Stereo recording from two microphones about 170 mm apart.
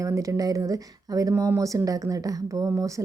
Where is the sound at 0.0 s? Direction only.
20° right (ahead or behind).